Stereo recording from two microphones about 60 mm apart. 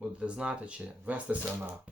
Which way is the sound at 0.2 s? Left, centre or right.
Centre.